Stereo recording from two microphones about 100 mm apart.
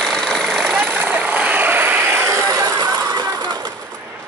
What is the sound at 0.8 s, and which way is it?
Vehicle, 20° right (ahead or behind).